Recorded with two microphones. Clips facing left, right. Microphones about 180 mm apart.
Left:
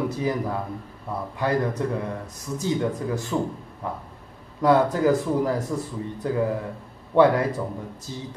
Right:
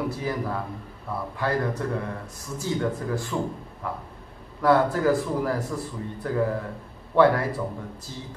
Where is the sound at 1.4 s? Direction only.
20° left (ahead or behind).